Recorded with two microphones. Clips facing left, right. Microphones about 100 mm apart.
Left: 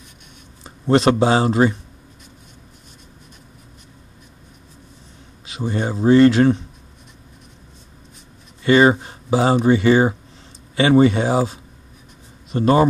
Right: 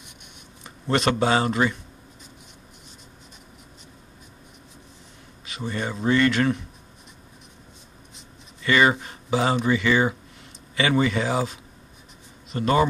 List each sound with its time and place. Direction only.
0.7 s a sound: 35° left (ahead or behind)
1.2 s speech: 35° left (ahead or behind)
5.6 s speech: 30° left (ahead or behind)
8.6 s speech: 30° left (ahead or behind)